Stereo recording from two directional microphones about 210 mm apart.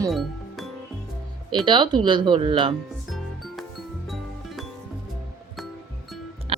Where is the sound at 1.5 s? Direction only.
20° right (ahead or behind).